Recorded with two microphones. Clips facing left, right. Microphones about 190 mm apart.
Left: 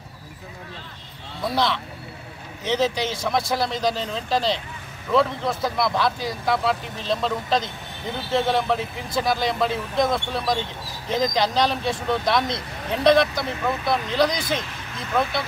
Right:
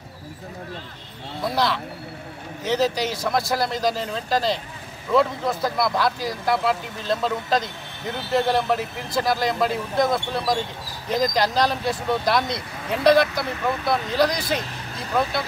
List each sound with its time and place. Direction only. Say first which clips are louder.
1.4 s speech: even; centre (ahead or behind)